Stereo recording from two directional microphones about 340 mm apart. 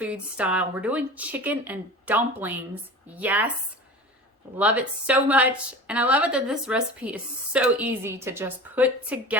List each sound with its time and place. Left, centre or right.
0.0 s a woman's voice: centre
4.5 s a woman's voice: centre